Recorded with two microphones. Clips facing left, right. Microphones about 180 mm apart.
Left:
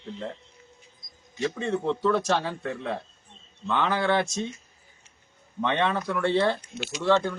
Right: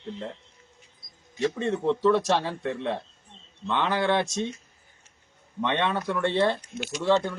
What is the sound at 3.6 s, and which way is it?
Speech, 20° right (ahead or behind).